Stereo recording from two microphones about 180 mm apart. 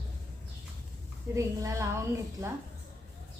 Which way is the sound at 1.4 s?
15° right (ahead or behind).